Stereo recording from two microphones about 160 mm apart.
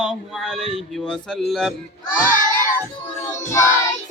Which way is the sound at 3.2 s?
20° left (ahead or behind).